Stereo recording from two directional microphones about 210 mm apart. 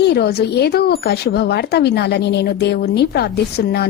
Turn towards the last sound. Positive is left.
turn(degrees=50)  # may be behind; listen again after turning